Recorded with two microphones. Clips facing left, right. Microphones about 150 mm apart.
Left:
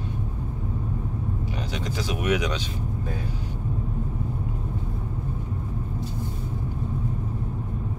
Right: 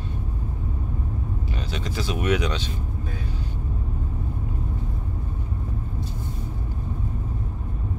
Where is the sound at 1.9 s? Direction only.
10° left (ahead or behind).